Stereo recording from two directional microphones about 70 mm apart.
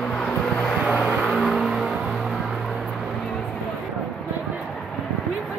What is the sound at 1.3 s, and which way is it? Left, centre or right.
Vehicle, centre.